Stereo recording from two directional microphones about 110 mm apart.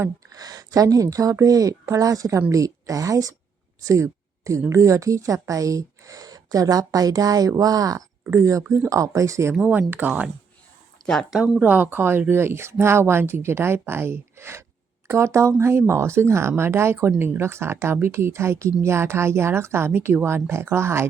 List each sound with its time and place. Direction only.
0.3 s a woman's voice: 35° right (ahead or behind)
3.8 s a sound: 30° right (ahead or behind)
4.7 s a woman's voice: 30° right (ahead or behind)
9.6 s speech: 15° right (ahead or behind)
11.0 s speech: 5° left (ahead or behind)
11.6 s a woman's voice: 15° right (ahead or behind)